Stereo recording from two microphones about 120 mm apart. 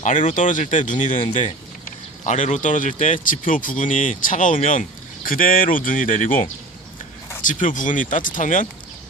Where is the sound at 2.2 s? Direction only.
90° left.